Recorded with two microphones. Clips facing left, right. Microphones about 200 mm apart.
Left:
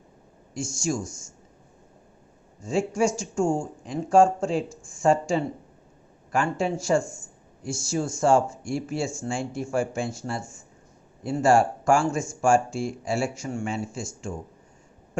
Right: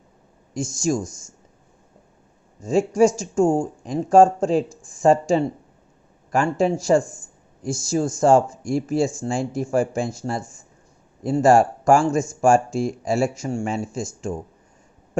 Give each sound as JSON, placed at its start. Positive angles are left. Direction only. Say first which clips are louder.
{"t": 2.6, "sound": "speech", "louder": "right 7 dB", "side_deg": -40}